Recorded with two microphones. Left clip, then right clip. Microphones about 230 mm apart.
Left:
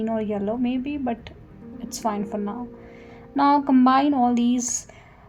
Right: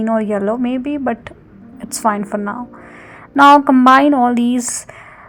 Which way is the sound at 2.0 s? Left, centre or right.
Right.